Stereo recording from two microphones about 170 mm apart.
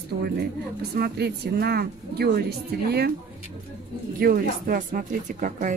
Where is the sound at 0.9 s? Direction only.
65° right (ahead or behind).